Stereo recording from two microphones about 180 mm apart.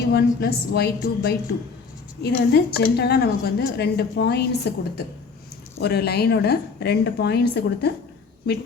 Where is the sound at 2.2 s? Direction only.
65° left (ahead or behind).